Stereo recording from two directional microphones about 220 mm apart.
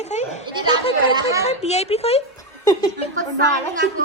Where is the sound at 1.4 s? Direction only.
30° left (ahead or behind).